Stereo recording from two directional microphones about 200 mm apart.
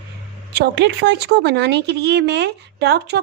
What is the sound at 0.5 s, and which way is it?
Speech, 60° right (ahead or behind).